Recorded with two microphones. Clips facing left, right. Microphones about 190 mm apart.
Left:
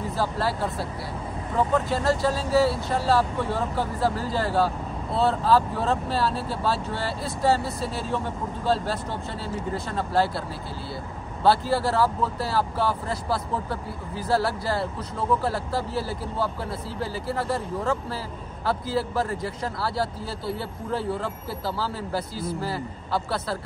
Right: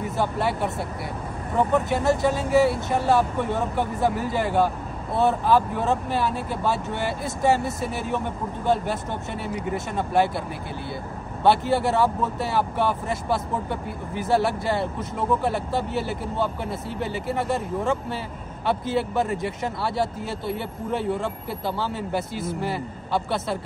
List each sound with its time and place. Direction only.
0.2 s speech: 20° right (ahead or behind)
11.4 s speech: 20° right (ahead or behind)